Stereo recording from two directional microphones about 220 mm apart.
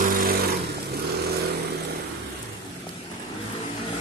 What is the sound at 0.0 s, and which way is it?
Vehicle, 40° right (ahead or behind).